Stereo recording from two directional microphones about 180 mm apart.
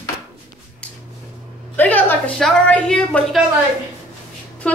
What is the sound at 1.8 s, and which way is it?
A woman's voice, 10° left (ahead or behind).